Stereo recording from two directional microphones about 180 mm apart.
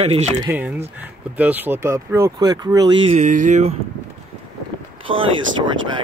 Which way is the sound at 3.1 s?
45° right (ahead or behind).